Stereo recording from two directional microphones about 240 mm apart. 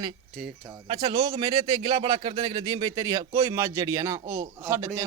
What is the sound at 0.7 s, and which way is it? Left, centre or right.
Speech, centre.